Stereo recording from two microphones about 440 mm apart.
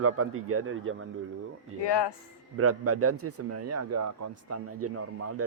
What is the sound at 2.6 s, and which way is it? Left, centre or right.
Speech, right.